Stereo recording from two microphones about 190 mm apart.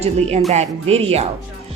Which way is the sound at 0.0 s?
35° right (ahead or behind).